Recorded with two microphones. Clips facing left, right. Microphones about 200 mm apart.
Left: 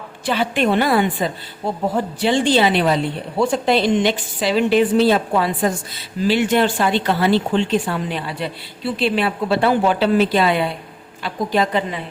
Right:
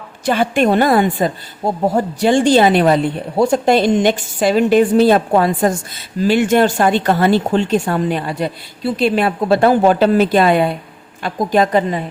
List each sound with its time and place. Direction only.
0.3 s a woman's voice: 45° right (ahead or behind)